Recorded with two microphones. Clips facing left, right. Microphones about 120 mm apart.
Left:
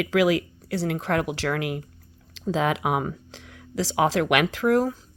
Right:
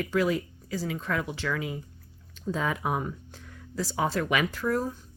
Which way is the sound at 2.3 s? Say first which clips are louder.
Left 6 dB; 85° left.